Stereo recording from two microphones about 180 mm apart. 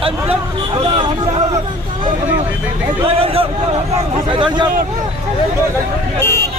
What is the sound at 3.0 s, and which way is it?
A man's voice, 30° right (ahead or behind).